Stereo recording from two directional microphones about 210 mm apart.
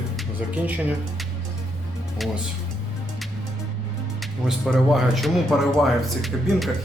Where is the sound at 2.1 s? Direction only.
Centre (ahead or behind).